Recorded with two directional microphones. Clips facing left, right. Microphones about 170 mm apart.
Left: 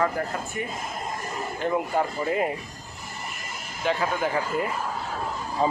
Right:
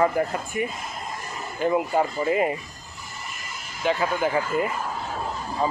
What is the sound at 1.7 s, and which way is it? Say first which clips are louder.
Speech: right 2 dB; 5° right (ahead or behind).